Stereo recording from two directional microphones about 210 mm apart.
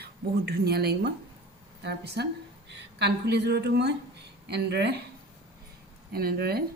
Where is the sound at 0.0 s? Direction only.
50° right (ahead or behind).